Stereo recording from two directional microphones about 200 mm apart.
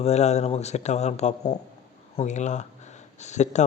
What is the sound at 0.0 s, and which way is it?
Speech, 35° left (ahead or behind).